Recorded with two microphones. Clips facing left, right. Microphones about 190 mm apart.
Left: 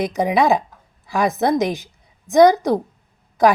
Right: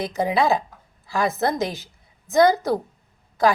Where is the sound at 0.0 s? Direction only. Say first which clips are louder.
Left 4 dB; 15° left (ahead or behind).